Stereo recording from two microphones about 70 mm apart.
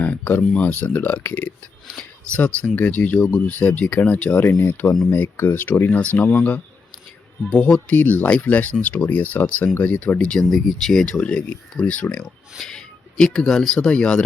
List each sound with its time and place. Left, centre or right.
0.0 s a sound: left
0.5 s speech: left
2.4 s speech: centre
4.4 s speech: left
10.2 s speech: centre
11.0 s speech: centre